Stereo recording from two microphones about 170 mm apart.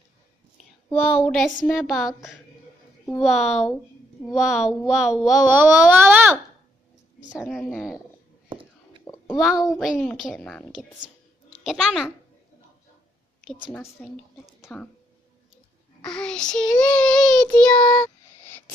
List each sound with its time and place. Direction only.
0.9 s a woman's voice: 35° left (ahead or behind)
1.2 s speech: 5° left (ahead or behind); by 6.4 s 15° right (ahead or behind)
7.3 s speech: centre (ahead or behind)
8.4 s whispering: 30° right (ahead or behind)
9.0 s a sound: 20° left (ahead or behind)
9.3 s speech: centre (ahead or behind)
13.5 s a woman's voice: 5° left (ahead or behind)
14.6 s a sound: 5° left (ahead or behind)
16.0 s a child's voice: 5° left (ahead or behind)